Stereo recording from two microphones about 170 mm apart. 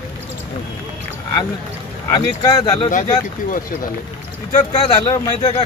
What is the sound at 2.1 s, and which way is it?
Speech, 20° left (ahead or behind).